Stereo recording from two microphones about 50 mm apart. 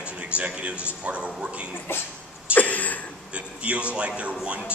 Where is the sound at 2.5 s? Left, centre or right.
Left.